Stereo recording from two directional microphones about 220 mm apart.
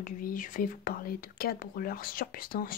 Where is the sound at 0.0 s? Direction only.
40° left (ahead or behind).